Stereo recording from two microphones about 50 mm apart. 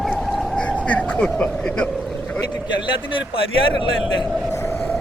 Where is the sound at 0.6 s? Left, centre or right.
Left.